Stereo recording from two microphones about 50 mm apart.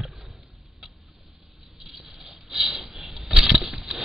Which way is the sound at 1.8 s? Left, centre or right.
Centre.